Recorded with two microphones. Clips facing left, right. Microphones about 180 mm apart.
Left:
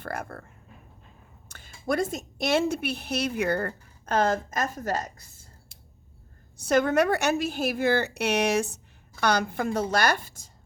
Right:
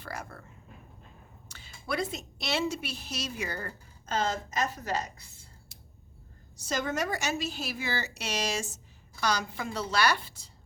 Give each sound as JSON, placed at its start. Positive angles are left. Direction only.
{"t": 0.0, "sound": "a woman's voice", "side_deg": 55}
{"t": 6.6, "sound": "a woman's voice", "side_deg": 60}